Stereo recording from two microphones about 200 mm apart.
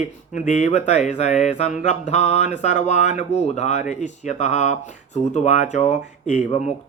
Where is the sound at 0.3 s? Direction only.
35° left (ahead or behind).